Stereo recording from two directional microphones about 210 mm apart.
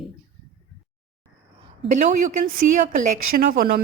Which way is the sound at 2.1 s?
40° right (ahead or behind).